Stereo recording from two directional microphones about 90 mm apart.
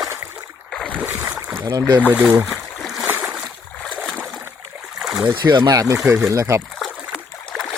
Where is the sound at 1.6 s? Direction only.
55° right (ahead or behind).